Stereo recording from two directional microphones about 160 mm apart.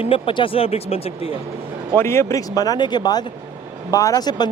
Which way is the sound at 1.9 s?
15° left (ahead or behind).